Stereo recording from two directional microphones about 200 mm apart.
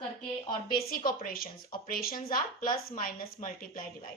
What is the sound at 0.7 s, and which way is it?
Speech, 45° left (ahead or behind).